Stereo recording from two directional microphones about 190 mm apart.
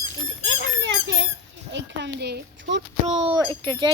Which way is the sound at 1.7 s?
65° right (ahead or behind).